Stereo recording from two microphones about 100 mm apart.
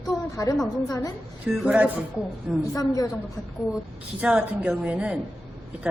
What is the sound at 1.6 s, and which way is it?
Speech, 15° right (ahead or behind).